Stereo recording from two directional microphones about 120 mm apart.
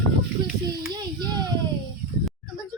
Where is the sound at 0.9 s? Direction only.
35° right (ahead or behind).